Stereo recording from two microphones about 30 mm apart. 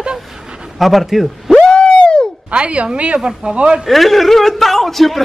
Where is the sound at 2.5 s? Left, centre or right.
Right.